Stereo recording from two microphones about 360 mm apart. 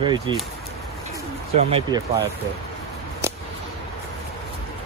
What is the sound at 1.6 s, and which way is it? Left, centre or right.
Speech, centre.